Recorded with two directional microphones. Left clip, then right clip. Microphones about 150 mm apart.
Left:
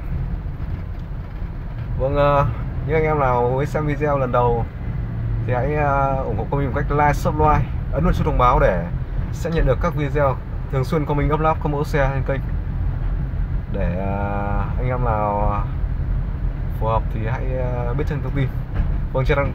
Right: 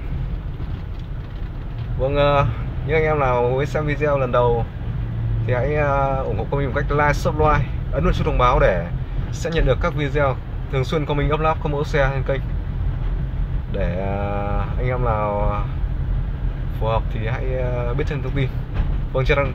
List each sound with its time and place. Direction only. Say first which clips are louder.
2.0 s speech: even; 15° left (ahead or behind)
13.7 s speech: right 1 dB; 10° left (ahead or behind)
16.8 s speech: left 1 dB; 15° left (ahead or behind)